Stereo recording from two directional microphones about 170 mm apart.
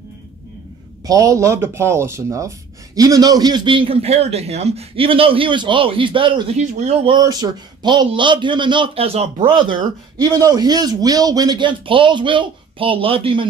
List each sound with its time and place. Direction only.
1.0 s a man's voice: 20° right (ahead or behind)
6.7 s a man's voice: 40° right (ahead or behind)
7.1 s a man's voice: 25° right (ahead or behind)